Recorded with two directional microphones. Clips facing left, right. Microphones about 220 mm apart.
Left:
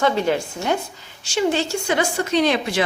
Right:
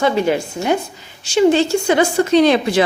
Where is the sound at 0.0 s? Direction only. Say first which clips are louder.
Right 3 dB; 10° right (ahead or behind).